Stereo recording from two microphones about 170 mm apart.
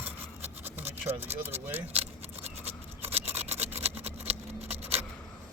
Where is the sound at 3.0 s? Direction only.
35° right (ahead or behind).